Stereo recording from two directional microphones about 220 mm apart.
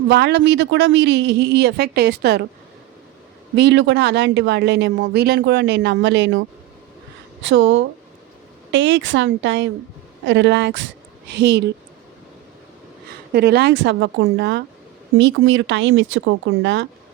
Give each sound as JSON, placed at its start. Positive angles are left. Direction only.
{"t": 0.1, "sound": "a woman's voice", "side_deg": -50}
{"t": 3.5, "sound": "a woman's voice", "side_deg": -50}
{"t": 7.4, "sound": "a woman's voice", "side_deg": -55}
{"t": 13.3, "sound": "a woman's voice", "side_deg": -50}